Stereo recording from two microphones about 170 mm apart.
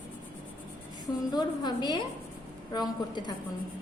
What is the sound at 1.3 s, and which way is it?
A woman's voice, 25° left (ahead or behind).